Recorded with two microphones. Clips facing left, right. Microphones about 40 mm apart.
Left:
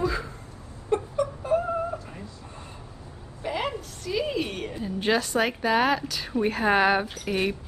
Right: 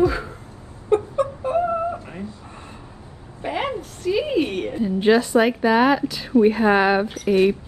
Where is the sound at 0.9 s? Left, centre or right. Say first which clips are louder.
Right 6 dB; right.